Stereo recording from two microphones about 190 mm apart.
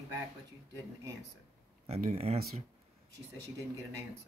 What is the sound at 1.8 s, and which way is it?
Speech, 35° right (ahead or behind).